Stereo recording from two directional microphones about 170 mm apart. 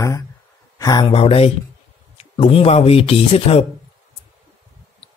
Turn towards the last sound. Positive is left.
turn(degrees=35)  # may be behind; listen again after turning